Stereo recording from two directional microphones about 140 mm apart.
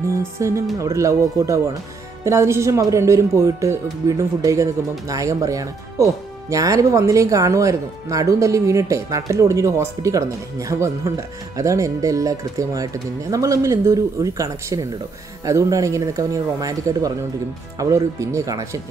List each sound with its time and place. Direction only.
0.1 s speech: 20° right (ahead or behind)